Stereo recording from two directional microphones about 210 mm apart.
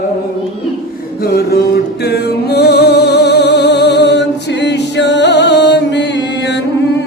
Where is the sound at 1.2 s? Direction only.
50° left (ahead or behind).